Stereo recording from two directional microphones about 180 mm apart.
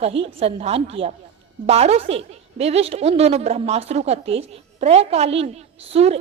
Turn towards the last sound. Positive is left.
turn(degrees=-35)  # may be behind; listen again after turning